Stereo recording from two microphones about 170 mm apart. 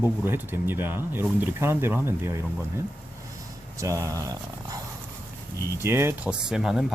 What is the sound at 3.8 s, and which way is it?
Speech, 20° right (ahead or behind).